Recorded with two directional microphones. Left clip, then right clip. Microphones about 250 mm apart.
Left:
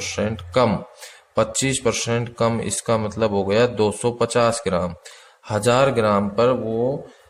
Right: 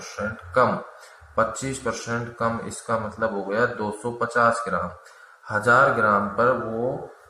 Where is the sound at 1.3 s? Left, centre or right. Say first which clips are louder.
Left 3 dB; left.